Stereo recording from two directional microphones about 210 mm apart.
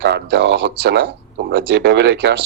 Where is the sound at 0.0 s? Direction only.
55° right (ahead or behind).